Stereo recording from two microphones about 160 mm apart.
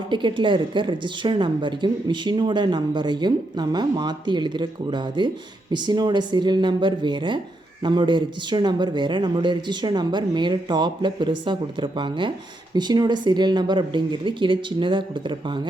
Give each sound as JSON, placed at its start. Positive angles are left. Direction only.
{"t": 0.1, "sound": "a woman's voice", "side_deg": -30}